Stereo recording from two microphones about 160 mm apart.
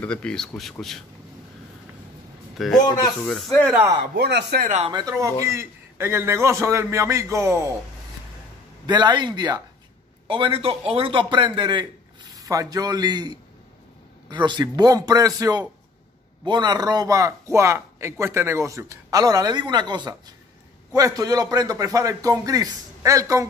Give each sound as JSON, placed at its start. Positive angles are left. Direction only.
{"t": 0.0, "sound": "a man's voice", "side_deg": 5}
{"t": 2.6, "sound": "a man's voice", "side_deg": 0}
{"t": 4.1, "sound": "speech", "side_deg": -90}
{"t": 4.6, "sound": "speech", "side_deg": -45}
{"t": 4.9, "sound": "a man's voice", "side_deg": -25}
{"t": 8.8, "sound": "a man's voice", "side_deg": -25}